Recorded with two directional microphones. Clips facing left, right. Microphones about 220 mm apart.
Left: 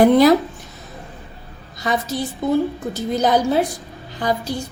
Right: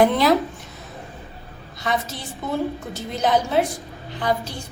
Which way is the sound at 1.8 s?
40° left (ahead or behind).